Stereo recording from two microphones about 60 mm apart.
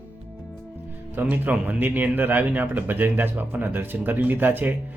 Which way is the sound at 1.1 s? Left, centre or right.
Right.